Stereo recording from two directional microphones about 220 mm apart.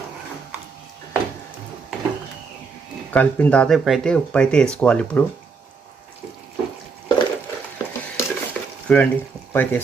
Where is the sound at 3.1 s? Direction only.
5° left (ahead or behind).